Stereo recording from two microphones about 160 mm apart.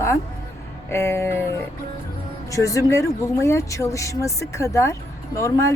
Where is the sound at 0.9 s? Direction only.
15° left (ahead or behind).